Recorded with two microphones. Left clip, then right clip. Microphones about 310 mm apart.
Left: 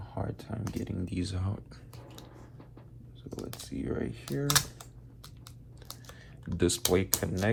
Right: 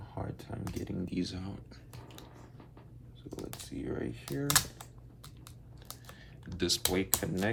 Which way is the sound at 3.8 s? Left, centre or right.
Centre.